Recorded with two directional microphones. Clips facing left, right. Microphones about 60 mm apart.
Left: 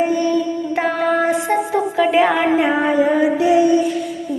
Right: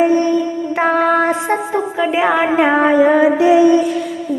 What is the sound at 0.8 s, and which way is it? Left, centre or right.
Child singing, right.